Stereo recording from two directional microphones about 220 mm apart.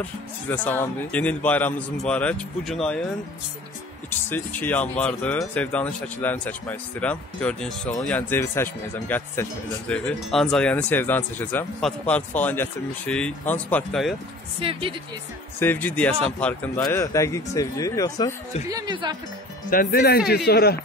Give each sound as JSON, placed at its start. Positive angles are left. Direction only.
{"t": 0.5, "sound": "speech", "side_deg": 10}
{"t": 4.3, "sound": "speech", "side_deg": 10}
{"t": 14.6, "sound": "speech", "side_deg": -25}
{"t": 15.6, "sound": "speech", "side_deg": 10}
{"t": 18.7, "sound": "speech", "side_deg": -15}
{"t": 19.7, "sound": "speech", "side_deg": 40}